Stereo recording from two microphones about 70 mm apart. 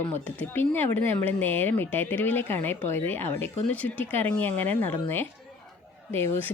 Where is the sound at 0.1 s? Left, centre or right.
Left.